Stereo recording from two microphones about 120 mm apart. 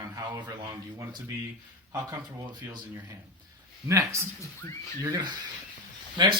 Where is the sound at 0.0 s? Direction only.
30° right (ahead or behind).